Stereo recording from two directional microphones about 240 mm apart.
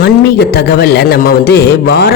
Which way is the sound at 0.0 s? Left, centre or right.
Left.